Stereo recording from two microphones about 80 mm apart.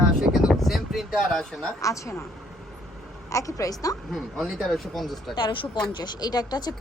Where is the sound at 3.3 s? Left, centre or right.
Left.